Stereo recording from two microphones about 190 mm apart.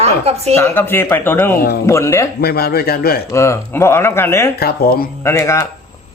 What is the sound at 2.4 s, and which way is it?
Speech, 55° left (ahead or behind).